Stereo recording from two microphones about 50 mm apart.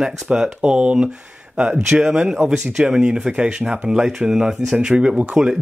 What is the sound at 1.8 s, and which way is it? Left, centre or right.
Speech, centre.